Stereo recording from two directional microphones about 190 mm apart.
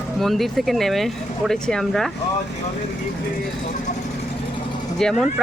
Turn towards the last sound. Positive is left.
turn(degrees=0)  # may be behind; listen again after turning